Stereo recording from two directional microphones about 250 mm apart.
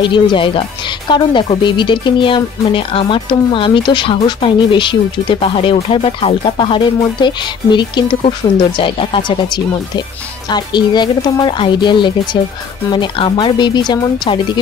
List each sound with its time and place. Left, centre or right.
0.0 s speech: centre
10.5 s speech: centre